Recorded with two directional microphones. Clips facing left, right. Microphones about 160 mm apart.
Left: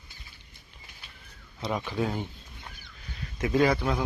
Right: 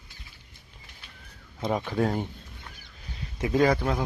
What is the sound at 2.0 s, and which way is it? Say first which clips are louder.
Speech: right 4 dB; 50° right (ahead or behind).